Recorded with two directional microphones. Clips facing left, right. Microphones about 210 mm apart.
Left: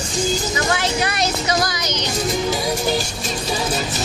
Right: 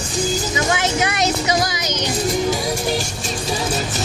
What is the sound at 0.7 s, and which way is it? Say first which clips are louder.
Speech: right 1 dB; 20° right (ahead or behind).